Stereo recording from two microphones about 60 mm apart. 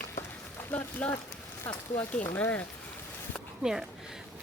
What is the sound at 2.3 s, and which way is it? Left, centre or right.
Speech, left.